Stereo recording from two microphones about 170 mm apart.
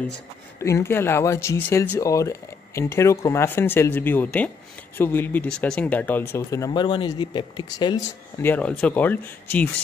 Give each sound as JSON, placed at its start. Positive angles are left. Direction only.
{"t": 0.6, "sound": "speech", "side_deg": 15}
{"t": 8.4, "sound": "speech", "side_deg": 10}